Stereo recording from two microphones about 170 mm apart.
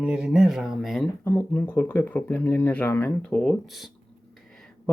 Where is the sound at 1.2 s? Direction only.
10° left (ahead or behind).